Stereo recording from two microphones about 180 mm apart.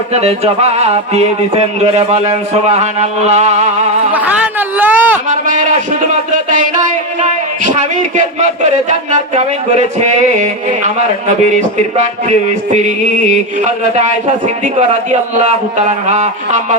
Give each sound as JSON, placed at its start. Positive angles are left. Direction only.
{"t": 0.1, "sound": "a man's voice", "side_deg": -35}
{"t": 4.8, "sound": "a sound", "side_deg": -10}
{"t": 5.3, "sound": "a man's voice", "side_deg": -45}